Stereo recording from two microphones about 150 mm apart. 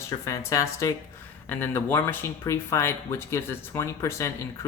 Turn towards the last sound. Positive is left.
turn(degrees=20)  # may be behind; listen again after turning